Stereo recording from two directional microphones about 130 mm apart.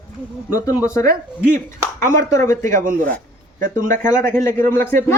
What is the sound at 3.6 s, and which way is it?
Speech, 90° right.